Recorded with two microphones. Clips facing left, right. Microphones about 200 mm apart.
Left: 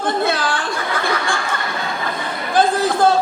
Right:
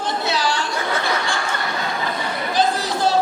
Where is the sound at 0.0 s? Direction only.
55° left (ahead or behind).